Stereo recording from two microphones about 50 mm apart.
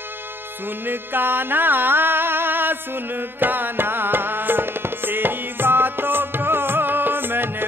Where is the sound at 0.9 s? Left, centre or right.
Right.